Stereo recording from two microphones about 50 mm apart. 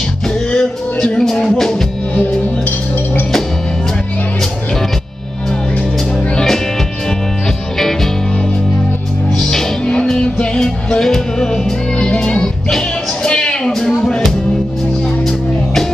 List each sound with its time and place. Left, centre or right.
0.6 s music: centre
9.4 s music: centre
13.7 s a sound: centre